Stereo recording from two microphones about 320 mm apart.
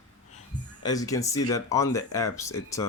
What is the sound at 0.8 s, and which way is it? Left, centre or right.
Speech, centre.